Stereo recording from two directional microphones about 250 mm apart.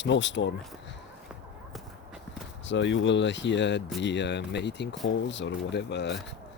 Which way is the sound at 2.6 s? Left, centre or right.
Left.